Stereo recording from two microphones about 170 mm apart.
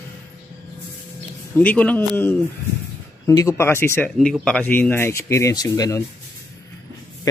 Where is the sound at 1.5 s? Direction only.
10° left (ahead or behind).